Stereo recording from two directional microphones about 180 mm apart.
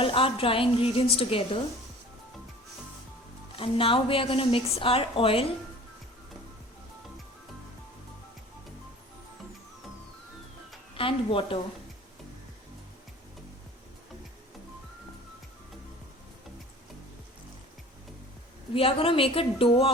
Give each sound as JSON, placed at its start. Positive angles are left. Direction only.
{"t": 0.0, "sound": "a woman's voice", "side_deg": 30}
{"t": 3.5, "sound": "a woman's voice", "side_deg": 30}
{"t": 10.9, "sound": "a woman's voice", "side_deg": 30}
{"t": 18.7, "sound": "a woman's voice", "side_deg": 30}